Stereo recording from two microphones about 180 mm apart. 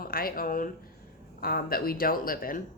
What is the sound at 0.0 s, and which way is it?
A woman's voice, 55° left (ahead or behind).